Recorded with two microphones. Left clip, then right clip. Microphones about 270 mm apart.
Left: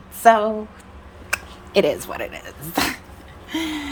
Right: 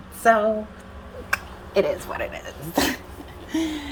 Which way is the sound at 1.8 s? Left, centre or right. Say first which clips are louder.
Left 3 dB; left.